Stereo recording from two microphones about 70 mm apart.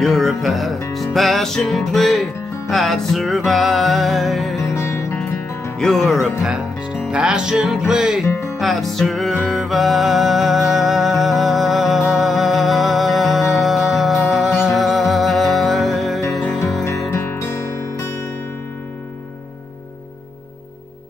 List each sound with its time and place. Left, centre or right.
0.0 s music: centre
4.7 s music: left
5.8 s music: centre
8.3 s music: left
8.5 s music: centre
17.1 s music: left